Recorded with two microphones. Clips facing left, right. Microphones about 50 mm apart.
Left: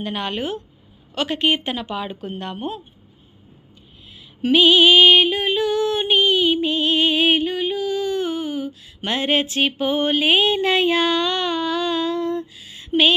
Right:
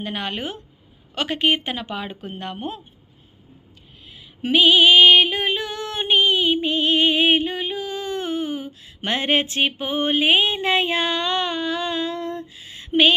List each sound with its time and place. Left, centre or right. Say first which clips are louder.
0.0 s speech: left 2 dB; right
4.4 s female singing: left 1 dB; centre
12.5 s a sound: right 3 dB; right